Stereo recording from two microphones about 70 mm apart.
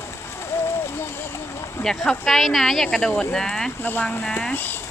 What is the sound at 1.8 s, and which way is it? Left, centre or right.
Speech, centre.